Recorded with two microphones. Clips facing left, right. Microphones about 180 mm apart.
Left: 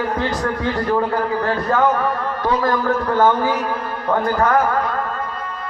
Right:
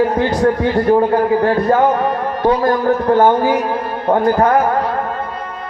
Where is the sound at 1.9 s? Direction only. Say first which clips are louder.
Right 4 dB; 20° right (ahead or behind).